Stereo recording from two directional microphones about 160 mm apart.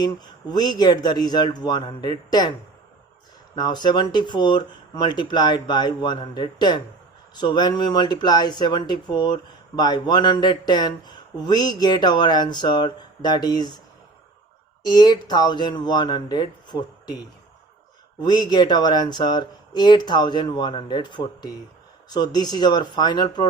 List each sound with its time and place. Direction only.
0.5 s speech: 25° left (ahead or behind)
3.5 s speech: 25° left (ahead or behind)
14.8 s speech: 25° left (ahead or behind)
18.2 s speech: 25° left (ahead or behind)